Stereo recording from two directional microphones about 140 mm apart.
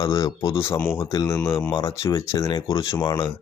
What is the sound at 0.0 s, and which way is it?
Speech, 25° left (ahead or behind).